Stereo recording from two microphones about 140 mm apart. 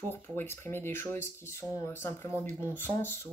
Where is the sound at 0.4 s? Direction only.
15° left (ahead or behind).